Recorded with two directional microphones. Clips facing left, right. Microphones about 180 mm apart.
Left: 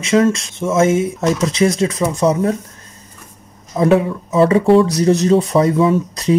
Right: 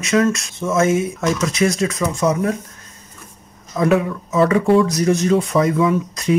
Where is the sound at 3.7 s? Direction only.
25° left (ahead or behind).